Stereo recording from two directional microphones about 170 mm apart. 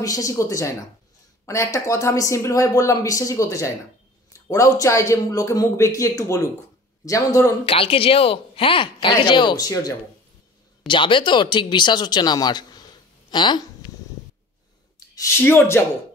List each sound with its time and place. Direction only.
0.0 s speech: 20° left (ahead or behind)
7.6 s speech: 35° left (ahead or behind)
13.3 s a sound: 25° left (ahead or behind)
15.1 s speech: 15° left (ahead or behind)